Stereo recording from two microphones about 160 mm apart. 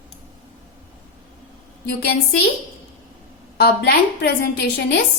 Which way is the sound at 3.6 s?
90° left.